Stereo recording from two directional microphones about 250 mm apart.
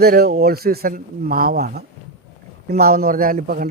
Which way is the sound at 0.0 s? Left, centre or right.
Right.